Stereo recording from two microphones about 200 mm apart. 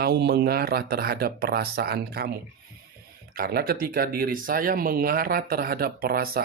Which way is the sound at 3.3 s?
50° right (ahead or behind).